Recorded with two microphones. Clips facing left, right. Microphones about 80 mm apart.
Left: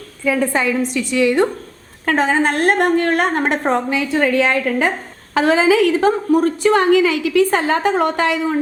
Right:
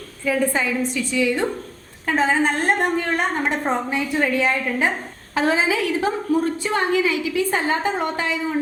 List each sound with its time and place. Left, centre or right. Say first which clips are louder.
0.3 s a woman's voice: left 4 dB; left
5.3 s a woman's voice: left 6 dB; left